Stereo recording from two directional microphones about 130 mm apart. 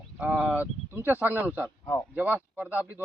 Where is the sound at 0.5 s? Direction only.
15° right (ahead or behind).